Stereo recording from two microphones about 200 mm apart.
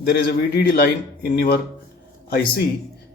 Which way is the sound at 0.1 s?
50° left (ahead or behind).